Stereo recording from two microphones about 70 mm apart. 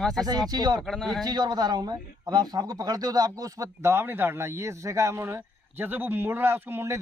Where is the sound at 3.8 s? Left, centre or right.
Right.